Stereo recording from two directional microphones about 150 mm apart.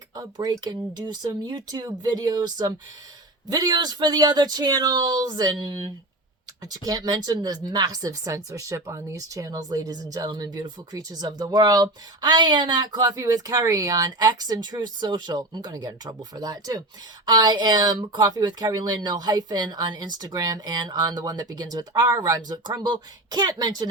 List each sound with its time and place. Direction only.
0.2 s speech: 25° right (ahead or behind)